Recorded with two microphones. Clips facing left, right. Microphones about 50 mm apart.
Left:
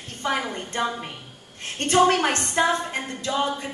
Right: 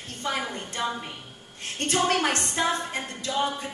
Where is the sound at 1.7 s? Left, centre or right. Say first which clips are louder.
Left 6 dB; left.